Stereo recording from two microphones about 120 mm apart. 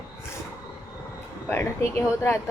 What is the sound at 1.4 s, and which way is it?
Speech, 20° left (ahead or behind).